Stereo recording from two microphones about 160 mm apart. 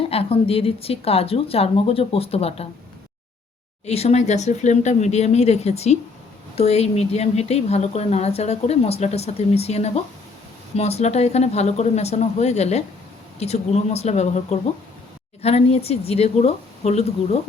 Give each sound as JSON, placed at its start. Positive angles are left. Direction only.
{"t": 0.1, "sound": "speech", "side_deg": 35}
{"t": 3.8, "sound": "speech", "side_deg": 40}